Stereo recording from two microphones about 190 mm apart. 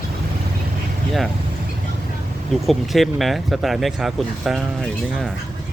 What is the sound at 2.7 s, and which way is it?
Speech, centre (ahead or behind).